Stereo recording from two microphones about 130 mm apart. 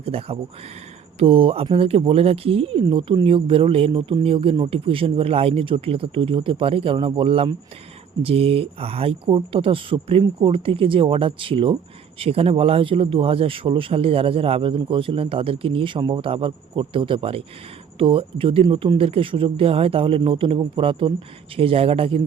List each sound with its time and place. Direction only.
0.0 s speech: 45° right (ahead or behind)